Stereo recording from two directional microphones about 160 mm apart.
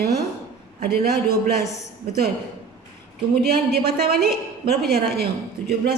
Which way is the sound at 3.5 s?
75° right (ahead or behind).